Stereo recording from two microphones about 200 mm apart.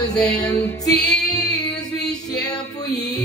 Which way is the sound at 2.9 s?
55° left (ahead or behind).